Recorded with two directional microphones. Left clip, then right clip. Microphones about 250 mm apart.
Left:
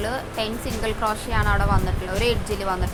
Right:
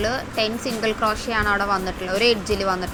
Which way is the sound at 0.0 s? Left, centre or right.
Centre.